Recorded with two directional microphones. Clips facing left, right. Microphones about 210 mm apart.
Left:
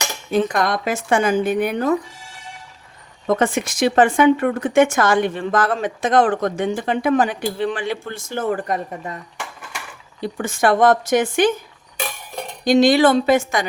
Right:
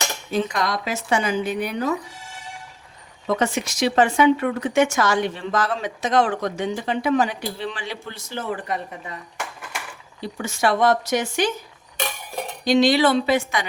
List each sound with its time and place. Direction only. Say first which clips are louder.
0.3 s speech: left 5 dB; 55° left (ahead or behind)
3.2 s speech: left 4 dB; 50° left (ahead or behind)
10.2 s speech: left 4 dB; 50° left (ahead or behind)
12.6 s speech: left 4 dB; 50° left (ahead or behind)